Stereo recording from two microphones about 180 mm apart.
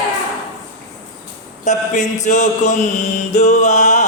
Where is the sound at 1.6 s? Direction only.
40° left (ahead or behind).